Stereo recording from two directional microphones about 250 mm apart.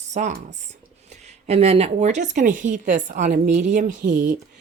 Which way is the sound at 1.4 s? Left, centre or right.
Right.